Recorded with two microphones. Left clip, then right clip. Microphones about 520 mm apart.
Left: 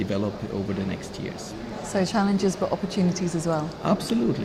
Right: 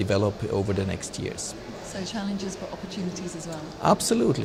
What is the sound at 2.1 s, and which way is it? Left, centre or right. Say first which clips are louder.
Speech: left 8 dB; left.